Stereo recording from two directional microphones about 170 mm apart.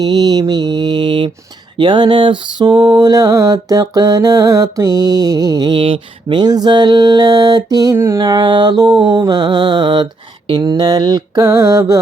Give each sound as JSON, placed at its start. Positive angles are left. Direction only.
{"t": 0.0, "sound": "mantra", "side_deg": -25}